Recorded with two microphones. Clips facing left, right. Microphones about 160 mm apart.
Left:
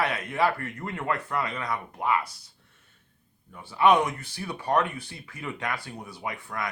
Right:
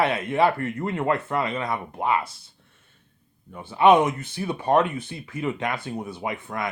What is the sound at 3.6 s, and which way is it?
Speech, 20° right (ahead or behind).